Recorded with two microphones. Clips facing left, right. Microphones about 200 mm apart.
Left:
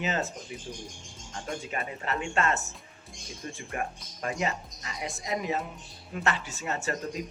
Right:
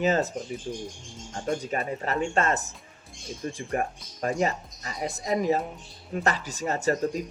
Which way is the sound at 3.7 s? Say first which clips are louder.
Right 5 dB; 40° right (ahead or behind).